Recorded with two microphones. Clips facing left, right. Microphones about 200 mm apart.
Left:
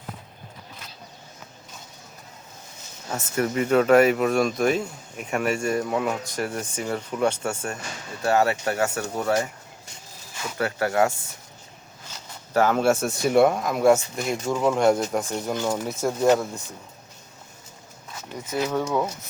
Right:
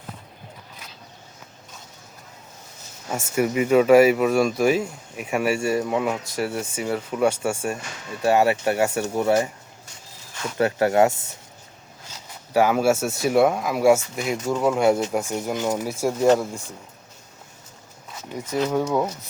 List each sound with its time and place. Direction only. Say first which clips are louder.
3.1 s speech: right 3 dB; 10° right (ahead or behind)
10.6 s speech: right 4 dB; 20° right (ahead or behind)
12.5 s speech: right 1 dB; 10° right (ahead or behind)
18.7 s speech: right 2 dB; 10° right (ahead or behind)